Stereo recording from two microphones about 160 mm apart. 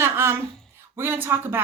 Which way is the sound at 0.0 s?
15° right (ahead or behind).